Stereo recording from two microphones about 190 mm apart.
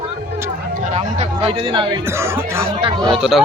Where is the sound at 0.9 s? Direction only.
30° right (ahead or behind).